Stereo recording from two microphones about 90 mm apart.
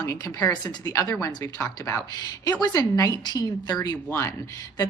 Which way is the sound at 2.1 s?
45° left (ahead or behind).